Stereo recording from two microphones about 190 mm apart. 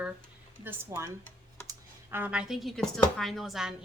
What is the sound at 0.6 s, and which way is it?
A woman's voice, 15° right (ahead or behind).